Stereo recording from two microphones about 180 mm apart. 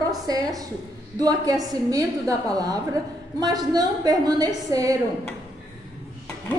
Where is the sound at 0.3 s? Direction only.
20° right (ahead or behind).